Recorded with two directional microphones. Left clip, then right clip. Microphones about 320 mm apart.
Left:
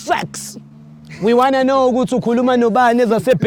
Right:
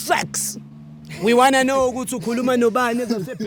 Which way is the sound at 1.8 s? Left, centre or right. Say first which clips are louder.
Left 6 dB; left.